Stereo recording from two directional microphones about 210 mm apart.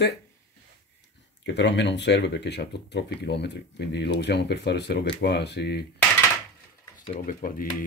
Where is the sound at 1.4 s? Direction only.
55° left (ahead or behind).